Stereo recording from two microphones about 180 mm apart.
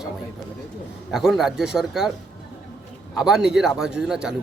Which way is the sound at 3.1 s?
5° right (ahead or behind).